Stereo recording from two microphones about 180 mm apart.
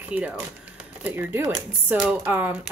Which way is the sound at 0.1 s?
5° right (ahead or behind).